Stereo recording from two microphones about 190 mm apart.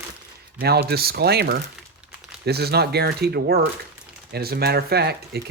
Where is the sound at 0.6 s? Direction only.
55° right (ahead or behind).